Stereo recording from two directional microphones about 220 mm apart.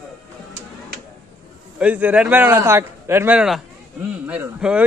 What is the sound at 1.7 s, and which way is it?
A man's voice, 5° right (ahead or behind).